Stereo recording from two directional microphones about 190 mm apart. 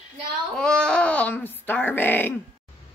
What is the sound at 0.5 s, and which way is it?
Speech, 5° left (ahead or behind).